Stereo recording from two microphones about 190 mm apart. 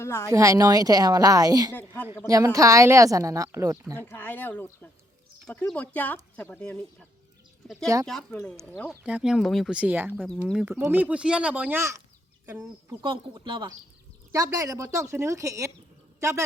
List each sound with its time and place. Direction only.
0.0 s speech: 15° left (ahead or behind)
0.3 s a woman's voice: 15° right (ahead or behind)
3.9 s speech: 10° left (ahead or behind)
9.0 s a woman's voice: 5° right (ahead or behind)
13.0 s a woman's voice: 25° right (ahead or behind)